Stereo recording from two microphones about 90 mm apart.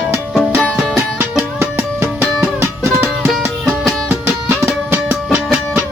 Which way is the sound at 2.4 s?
20° right (ahead or behind).